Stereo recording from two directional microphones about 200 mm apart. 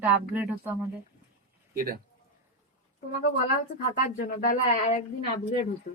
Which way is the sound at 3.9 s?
45° left (ahead or behind).